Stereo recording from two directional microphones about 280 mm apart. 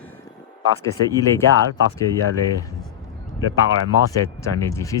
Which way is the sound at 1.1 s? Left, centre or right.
Centre.